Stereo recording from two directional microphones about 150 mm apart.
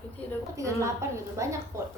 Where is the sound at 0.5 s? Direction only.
20° right (ahead or behind).